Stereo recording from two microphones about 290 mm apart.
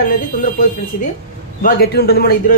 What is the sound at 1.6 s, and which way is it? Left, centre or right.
Speech, left.